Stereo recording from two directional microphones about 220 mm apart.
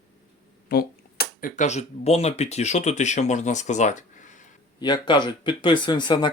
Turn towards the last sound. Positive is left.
turn(degrees=20)  # may be behind; listen again after turning